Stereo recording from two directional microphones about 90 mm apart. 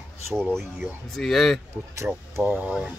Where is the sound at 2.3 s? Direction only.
25° right (ahead or behind).